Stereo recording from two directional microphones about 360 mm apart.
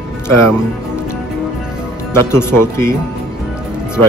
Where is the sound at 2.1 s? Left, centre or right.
Centre.